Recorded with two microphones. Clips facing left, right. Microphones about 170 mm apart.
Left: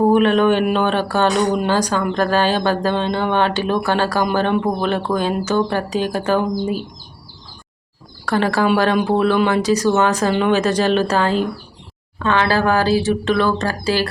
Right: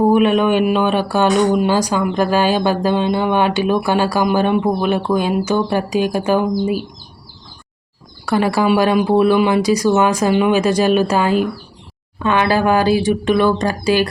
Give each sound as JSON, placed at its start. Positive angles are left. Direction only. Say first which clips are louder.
{"t": 0.0, "sound": "speech", "louder": "right 1 dB", "side_deg": -10}
{"t": 8.2, "sound": "speech", "louder": "right 2 dB", "side_deg": -10}